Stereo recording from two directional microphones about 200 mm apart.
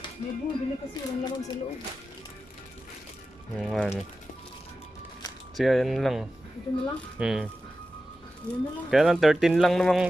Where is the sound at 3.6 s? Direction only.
Centre (ahead or behind).